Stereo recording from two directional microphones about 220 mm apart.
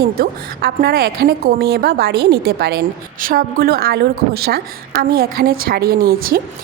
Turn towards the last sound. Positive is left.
turn(degrees=-45)  # may be behind; listen again after turning